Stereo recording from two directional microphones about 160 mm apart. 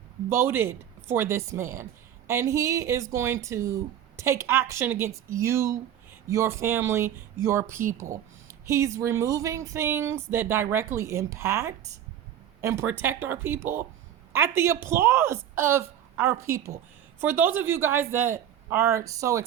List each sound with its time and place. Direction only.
0.3 s speech: 15° right (ahead or behind)